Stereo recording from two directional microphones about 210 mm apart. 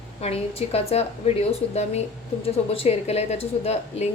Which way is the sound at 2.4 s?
25° left (ahead or behind).